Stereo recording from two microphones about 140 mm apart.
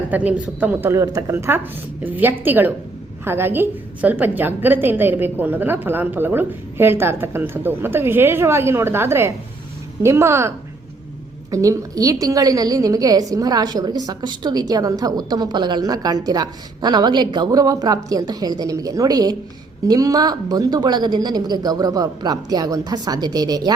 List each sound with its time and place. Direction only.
0.1 s a woman's voice: 10° right (ahead or behind)
11.5 s a woman's voice: 25° right (ahead or behind)